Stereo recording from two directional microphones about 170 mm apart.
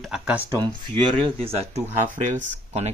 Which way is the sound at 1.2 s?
35° right (ahead or behind).